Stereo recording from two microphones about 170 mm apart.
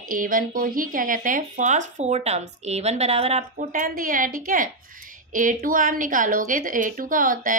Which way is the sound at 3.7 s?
55° right (ahead or behind).